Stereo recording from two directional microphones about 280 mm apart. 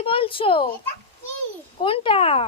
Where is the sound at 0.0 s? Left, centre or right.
Centre.